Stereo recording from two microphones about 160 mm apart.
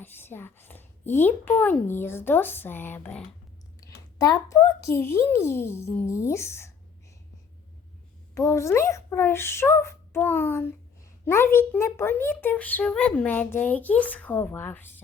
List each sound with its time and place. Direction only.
0.0 s a child's voice: 15° left (ahead or behind)
3.8 s a child's voice: 20° left (ahead or behind)
8.4 s a child's voice: 20° left (ahead or behind)